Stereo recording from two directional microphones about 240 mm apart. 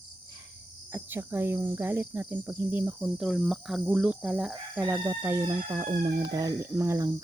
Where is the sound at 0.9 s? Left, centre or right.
Centre.